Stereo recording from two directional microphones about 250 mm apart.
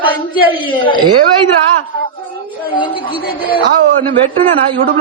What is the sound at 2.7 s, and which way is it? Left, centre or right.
Speech, centre.